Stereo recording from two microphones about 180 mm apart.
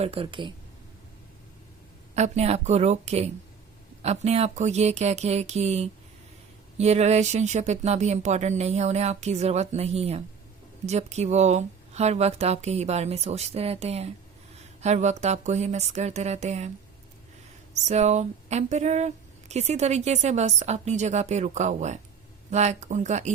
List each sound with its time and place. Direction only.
0.0 s speech: 30° right (ahead or behind)
2.1 s speech: 40° right (ahead or behind)
17.7 s speech: 40° right (ahead or behind)